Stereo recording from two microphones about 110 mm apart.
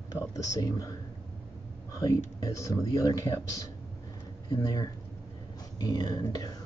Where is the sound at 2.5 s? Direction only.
30° left (ahead or behind).